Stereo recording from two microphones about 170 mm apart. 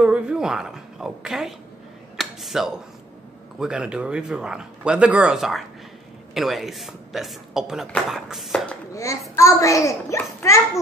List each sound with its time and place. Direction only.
0.0 s speech: 5° right (ahead or behind)
2.1 s a sound: centre (ahead or behind)
3.5 s speech: 5° right (ahead or behind)
8.9 s a child's voice: 20° left (ahead or behind)